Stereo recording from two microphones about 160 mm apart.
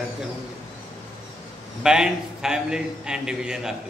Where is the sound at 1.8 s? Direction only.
5° right (ahead or behind).